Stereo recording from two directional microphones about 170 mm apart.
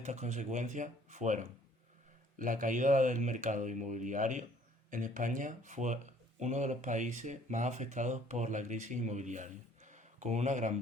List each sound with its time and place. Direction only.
0.0 s speech: 45° right (ahead or behind)